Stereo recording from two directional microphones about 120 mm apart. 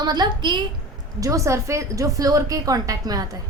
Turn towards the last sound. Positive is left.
turn(degrees=-30)  # may be behind; listen again after turning